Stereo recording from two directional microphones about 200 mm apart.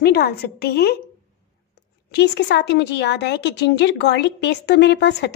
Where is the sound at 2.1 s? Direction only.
55° left (ahead or behind).